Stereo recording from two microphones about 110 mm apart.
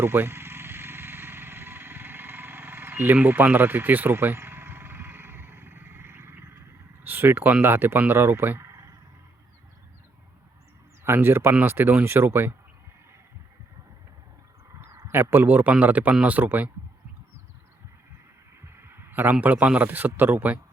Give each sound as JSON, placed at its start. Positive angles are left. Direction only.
{"t": 0.0, "sound": "vehicle", "side_deg": -20}
{"t": 7.0, "sound": "speech", "side_deg": -20}
{"t": 11.0, "sound": "speech", "side_deg": -20}
{"t": 14.8, "sound": "a man's voice", "side_deg": -25}
{"t": 18.6, "sound": "a man's voice", "side_deg": -20}